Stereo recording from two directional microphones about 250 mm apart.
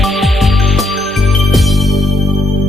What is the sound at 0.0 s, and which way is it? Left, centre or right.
Music, centre.